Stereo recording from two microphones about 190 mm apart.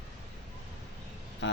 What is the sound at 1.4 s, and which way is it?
Speech, 70° left (ahead or behind).